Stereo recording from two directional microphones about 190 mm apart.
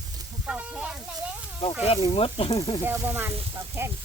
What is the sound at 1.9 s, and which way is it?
Speech, 30° left (ahead or behind).